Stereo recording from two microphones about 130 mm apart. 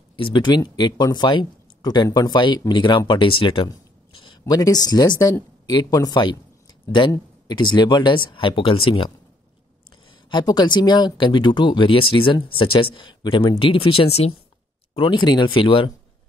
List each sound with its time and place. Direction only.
0.1 s speech: 40° left (ahead or behind)
7.4 s speech: 35° left (ahead or behind)
10.3 s speech: 35° left (ahead or behind); by 14.3 s 50° left (ahead or behind)
15.0 s speech: 35° left (ahead or behind)